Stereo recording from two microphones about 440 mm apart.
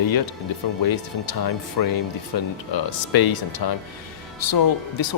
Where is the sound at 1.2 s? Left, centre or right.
Left.